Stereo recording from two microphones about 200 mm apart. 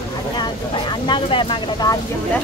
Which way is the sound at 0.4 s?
25° left (ahead or behind).